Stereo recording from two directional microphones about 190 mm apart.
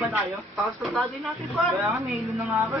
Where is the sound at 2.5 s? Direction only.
15° right (ahead or behind).